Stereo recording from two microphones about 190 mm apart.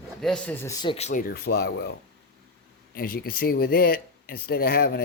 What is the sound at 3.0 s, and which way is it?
Speech, 50° left (ahead or behind).